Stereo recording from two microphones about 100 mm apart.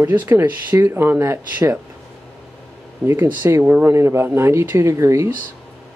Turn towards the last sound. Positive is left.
turn(degrees=-25)  # may be behind; listen again after turning